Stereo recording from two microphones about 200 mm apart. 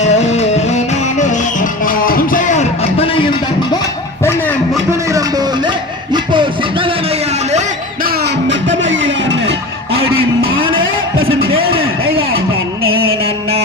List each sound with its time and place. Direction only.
0.0 s music: 35° left (ahead or behind)
1.8 s music: 45° left (ahead or behind)
4.2 s a sound: 10° left (ahead or behind)
5.1 s music: 20° right (ahead or behind)
8.0 s music: 60° right (ahead or behind)
10.8 s a sound: 85° right